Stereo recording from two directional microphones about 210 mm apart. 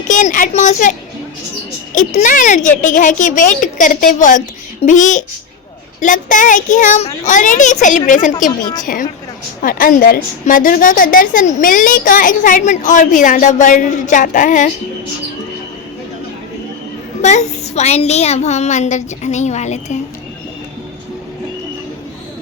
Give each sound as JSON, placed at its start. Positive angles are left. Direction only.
{"t": 0.1, "sound": "a woman's voice", "side_deg": 35}
{"t": 17.2, "sound": "a woman's voice", "side_deg": 35}